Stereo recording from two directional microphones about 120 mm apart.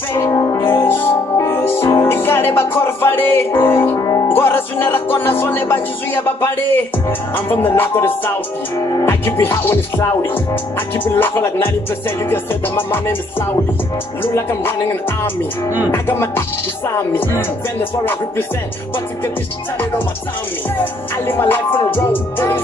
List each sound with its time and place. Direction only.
0.1 s music: 25° left (ahead or behind)
6.2 s speech: 15° left (ahead or behind)
8.7 s music: 30° left (ahead or behind)
9.0 s speech: 20° left (ahead or behind)
11.1 s speech: 20° left (ahead or behind)
12.3 s music: 15° left (ahead or behind)
14.2 s speech: 20° left (ahead or behind)
15.9 s speech: 20° left (ahead or behind)
20.8 s music: 15° left (ahead or behind)